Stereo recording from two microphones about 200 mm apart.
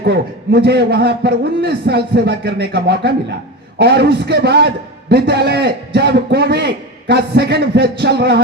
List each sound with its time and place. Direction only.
0.0 s a man's voice: 55° right (ahead or behind)